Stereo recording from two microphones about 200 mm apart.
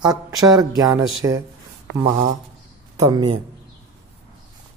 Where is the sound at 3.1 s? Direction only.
20° right (ahead or behind).